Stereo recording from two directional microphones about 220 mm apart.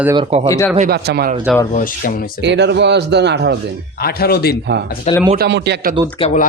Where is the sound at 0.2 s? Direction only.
30° right (ahead or behind).